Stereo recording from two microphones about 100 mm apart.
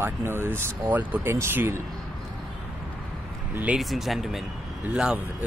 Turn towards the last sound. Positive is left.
turn(degrees=-10)  # may be behind; listen again after turning